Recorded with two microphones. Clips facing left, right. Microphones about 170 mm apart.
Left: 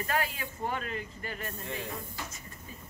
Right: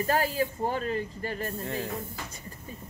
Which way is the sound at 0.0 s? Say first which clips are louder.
Right 6 dB; 35° right (ahead or behind).